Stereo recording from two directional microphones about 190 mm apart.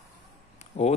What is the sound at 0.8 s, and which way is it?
Speech, 40° left (ahead or behind).